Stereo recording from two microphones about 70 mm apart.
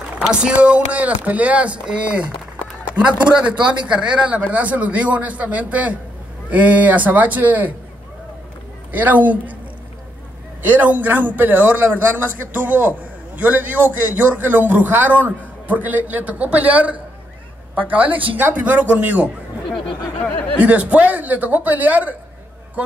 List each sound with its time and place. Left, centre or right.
0.3 s a man's voice: centre
8.9 s a man's voice: right
10.6 s a man's voice: right
20.2 s speech: centre
20.6 s a man's voice: centre